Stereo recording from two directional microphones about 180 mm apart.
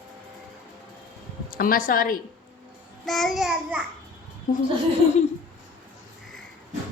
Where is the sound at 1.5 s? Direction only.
50° left (ahead or behind).